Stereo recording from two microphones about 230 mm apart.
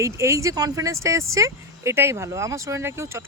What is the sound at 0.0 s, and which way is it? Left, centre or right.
Speech, centre.